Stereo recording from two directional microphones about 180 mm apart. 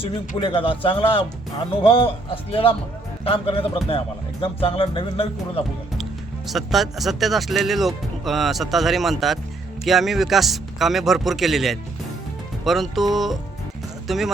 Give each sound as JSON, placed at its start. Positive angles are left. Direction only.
{"t": 0.0, "sound": "speech", "side_deg": 30}
{"t": 6.5, "sound": "speech", "side_deg": 0}